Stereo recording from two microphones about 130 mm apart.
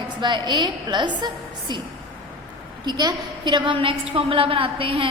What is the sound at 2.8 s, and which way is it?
A woman's voice, 35° right (ahead or behind).